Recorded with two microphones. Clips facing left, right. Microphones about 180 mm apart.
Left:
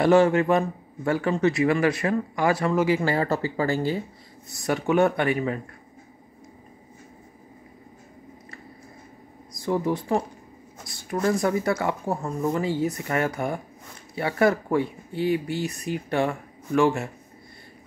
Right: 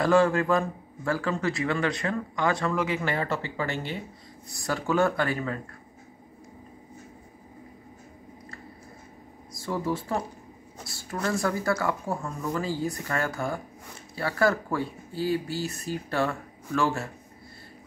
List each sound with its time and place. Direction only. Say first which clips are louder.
0.0 s speech: left 4 dB; 25° left (ahead or behind)
4.6 s speech: left 4 dB; 20° left (ahead or behind)
9.6 s speech: left 4 dB; 20° left (ahead or behind)